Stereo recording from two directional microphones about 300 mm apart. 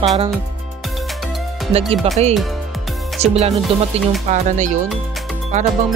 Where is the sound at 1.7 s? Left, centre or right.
Centre.